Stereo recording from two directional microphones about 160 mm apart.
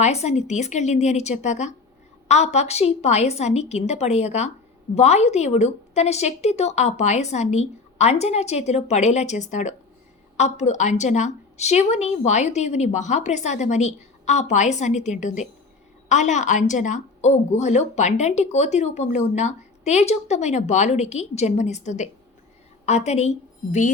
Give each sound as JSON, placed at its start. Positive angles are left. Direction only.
{"t": 0.0, "sound": "speech", "side_deg": 45}